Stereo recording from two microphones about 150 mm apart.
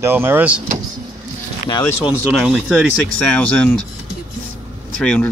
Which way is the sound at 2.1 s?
Centre (ahead or behind).